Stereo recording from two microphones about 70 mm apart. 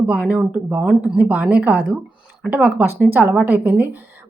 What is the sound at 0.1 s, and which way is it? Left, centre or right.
A woman's voice, centre.